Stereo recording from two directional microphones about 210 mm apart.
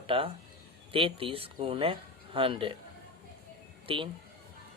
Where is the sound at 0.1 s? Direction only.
25° right (ahead or behind).